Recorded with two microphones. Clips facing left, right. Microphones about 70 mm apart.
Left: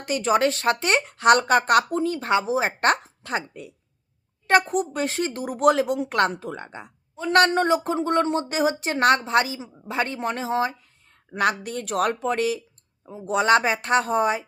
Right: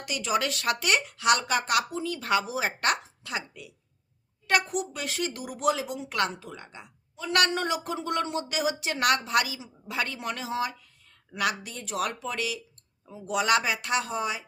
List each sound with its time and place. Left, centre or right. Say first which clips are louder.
0.0 s speech: left 7 dB; left